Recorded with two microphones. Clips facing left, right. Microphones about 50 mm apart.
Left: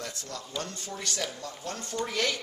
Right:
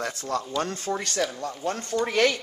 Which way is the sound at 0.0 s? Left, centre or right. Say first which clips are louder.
Right 10 dB; right.